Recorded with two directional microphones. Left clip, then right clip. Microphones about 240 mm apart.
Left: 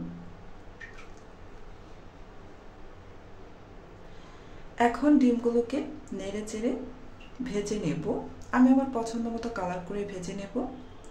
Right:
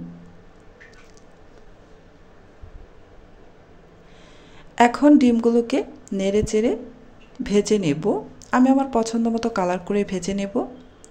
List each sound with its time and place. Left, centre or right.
4.7 s speech: right